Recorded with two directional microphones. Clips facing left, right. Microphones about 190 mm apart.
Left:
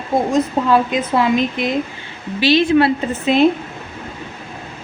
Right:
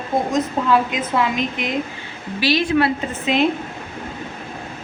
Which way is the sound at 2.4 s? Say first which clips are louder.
Left 5 dB; 25° left (ahead or behind).